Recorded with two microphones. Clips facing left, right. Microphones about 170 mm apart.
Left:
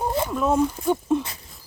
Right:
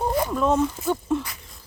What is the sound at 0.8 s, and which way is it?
Speech, 20° left (ahead or behind).